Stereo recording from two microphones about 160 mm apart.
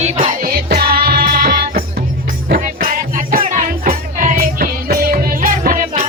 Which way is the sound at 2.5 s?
55° right (ahead or behind).